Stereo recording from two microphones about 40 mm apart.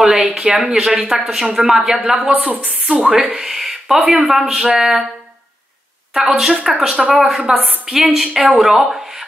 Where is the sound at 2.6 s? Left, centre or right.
Right.